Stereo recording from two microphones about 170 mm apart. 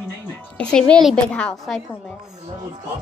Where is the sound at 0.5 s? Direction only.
5° left (ahead or behind).